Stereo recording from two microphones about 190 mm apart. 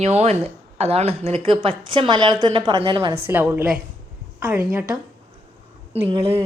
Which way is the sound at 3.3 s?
10° right (ahead or behind).